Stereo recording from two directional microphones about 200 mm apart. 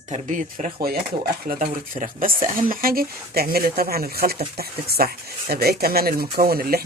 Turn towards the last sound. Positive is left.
turn(degrees=-50)  # may be behind; listen again after turning